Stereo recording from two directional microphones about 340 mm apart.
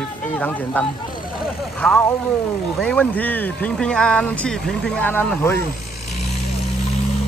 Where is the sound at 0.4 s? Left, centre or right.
Centre.